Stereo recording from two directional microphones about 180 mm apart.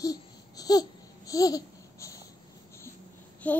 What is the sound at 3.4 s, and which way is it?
Child singing, 10° left (ahead or behind).